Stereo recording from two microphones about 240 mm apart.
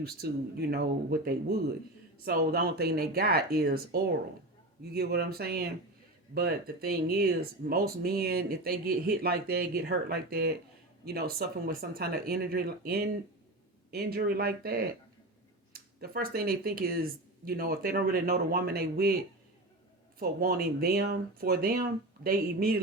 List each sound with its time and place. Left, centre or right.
0.0 s speech: right
20.1 s speech: right